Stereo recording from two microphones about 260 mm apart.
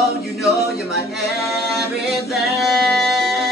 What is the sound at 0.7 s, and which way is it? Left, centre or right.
A capella, centre.